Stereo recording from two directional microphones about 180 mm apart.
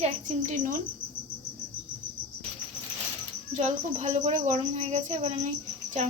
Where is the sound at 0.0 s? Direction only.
40° right (ahead or behind).